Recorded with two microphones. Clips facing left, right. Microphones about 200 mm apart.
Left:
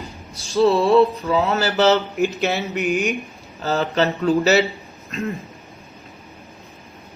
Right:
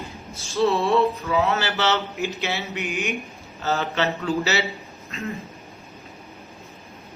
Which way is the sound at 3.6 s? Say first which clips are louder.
Left 4 dB; 35° left (ahead or behind).